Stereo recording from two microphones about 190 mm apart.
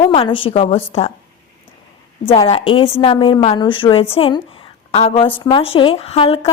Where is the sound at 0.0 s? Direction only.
30° left (ahead or behind).